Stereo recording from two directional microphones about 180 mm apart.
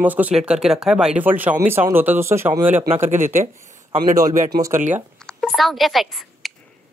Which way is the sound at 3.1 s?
45° right (ahead or behind).